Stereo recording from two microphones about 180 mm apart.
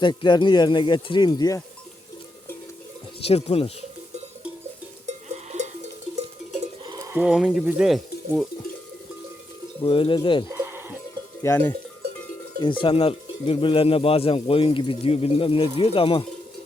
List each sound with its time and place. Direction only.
0.0 s speech: 25° left (ahead or behind)
3.2 s speech: 35° left (ahead or behind)
5.0 s sheep: 40° right (ahead or behind)
6.8 s sheep: 25° right (ahead or behind)
7.1 s speech: 5° right (ahead or behind)
9.8 s speech: 30° left (ahead or behind)
10.5 s sheep: 15° right (ahead or behind)
11.4 s cowbell: 10° left (ahead or behind)
12.5 s speech: 25° left (ahead or behind)